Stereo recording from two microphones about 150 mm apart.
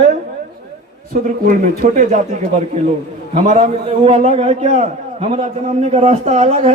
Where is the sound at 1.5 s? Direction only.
65° right (ahead or behind).